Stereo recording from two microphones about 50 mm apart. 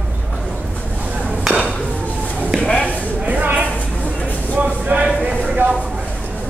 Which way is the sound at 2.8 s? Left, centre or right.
Right.